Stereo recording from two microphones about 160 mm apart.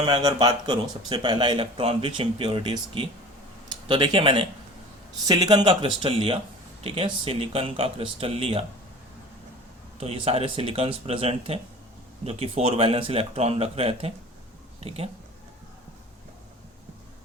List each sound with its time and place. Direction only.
0.0 s a man's voice: 25° right (ahead or behind)
10.0 s speech: 35° right (ahead or behind)